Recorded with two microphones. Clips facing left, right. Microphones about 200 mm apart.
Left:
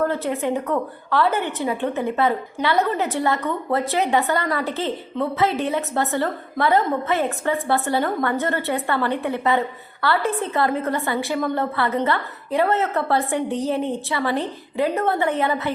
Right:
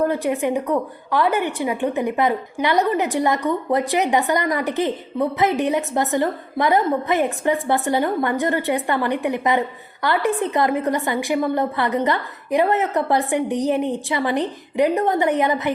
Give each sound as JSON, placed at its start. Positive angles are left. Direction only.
{"t": 0.0, "sound": "a woman's voice", "side_deg": -15}